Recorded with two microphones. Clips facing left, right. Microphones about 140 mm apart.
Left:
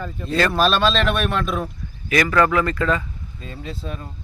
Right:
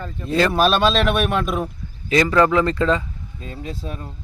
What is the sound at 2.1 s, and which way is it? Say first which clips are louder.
Speech: right 2 dB; 25° right (ahead or behind).